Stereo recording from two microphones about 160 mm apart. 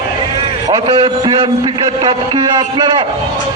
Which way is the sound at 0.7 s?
30° right (ahead or behind).